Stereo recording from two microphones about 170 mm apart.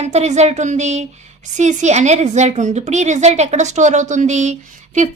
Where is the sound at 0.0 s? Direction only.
40° right (ahead or behind).